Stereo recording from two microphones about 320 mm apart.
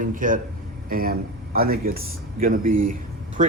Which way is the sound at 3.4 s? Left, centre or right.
Right.